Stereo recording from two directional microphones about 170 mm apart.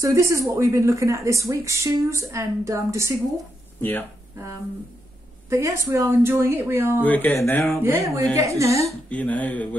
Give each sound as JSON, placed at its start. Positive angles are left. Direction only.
{"t": 0.0, "sound": "speech", "side_deg": -15}
{"t": 5.5, "sound": "speech", "side_deg": -15}
{"t": 7.0, "sound": "speech", "side_deg": 10}
{"t": 7.8, "sound": "speech", "side_deg": -15}
{"t": 9.1, "sound": "speech", "side_deg": 10}